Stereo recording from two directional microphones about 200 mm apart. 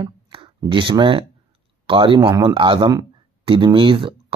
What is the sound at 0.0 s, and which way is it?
Speech, 25° right (ahead or behind).